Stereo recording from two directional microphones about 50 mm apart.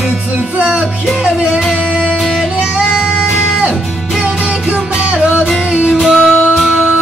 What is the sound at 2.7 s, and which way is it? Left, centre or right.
Music, right.